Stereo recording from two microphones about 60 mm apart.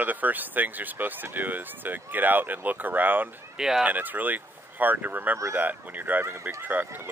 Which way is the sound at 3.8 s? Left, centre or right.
Right.